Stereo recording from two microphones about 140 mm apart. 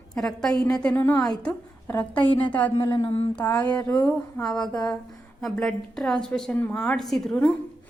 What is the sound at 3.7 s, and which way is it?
A woman's voice, 10° left (ahead or behind).